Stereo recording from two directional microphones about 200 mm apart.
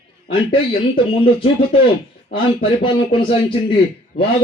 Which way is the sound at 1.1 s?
25° left (ahead or behind).